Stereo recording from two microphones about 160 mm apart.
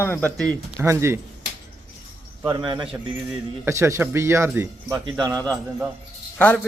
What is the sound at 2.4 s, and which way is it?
A man's voice, 25° right (ahead or behind).